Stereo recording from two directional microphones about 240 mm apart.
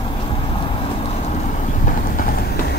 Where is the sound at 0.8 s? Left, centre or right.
Left.